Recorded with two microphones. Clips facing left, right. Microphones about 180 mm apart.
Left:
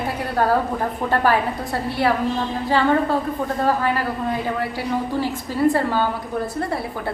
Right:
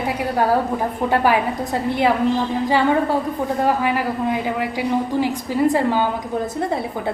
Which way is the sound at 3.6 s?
15° right (ahead or behind).